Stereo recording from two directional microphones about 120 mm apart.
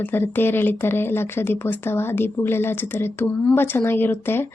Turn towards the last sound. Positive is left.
turn(degrees=20)  # may be behind; listen again after turning